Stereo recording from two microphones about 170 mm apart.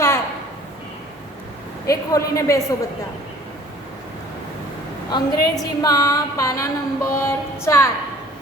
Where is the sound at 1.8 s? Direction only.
20° left (ahead or behind).